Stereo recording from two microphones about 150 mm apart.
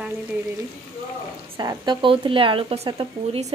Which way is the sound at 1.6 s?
30° right (ahead or behind).